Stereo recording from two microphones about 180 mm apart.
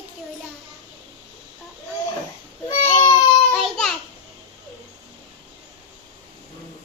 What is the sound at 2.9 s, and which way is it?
Baby cry, 25° left (ahead or behind).